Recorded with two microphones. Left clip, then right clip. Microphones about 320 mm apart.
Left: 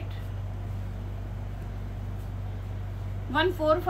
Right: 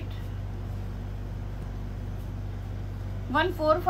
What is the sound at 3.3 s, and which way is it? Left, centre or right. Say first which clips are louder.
Speech: even; centre.